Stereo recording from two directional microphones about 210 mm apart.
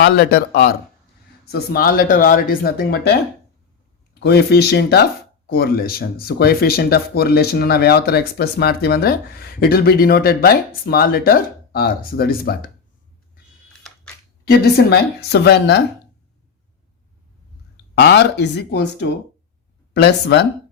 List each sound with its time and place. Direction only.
0.0 s speech: 50° left (ahead or behind)
14.4 s speech: 50° left (ahead or behind)
17.9 s speech: 55° left (ahead or behind)